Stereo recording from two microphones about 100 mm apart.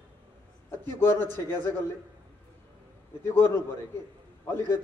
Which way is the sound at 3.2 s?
25° left (ahead or behind).